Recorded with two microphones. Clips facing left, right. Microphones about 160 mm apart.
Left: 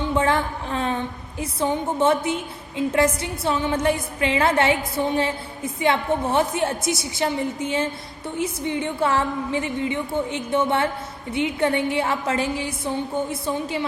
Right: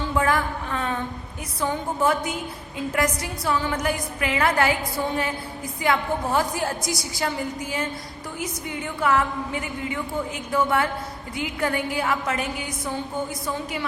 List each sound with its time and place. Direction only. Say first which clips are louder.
0.0 s a woman's voice: left 2 dB; 25° left (ahead or behind)